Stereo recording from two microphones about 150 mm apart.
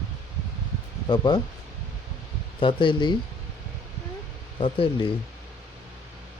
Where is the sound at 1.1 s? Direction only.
30° left (ahead or behind).